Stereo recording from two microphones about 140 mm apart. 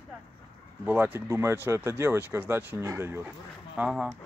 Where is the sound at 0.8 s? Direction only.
15° right (ahead or behind).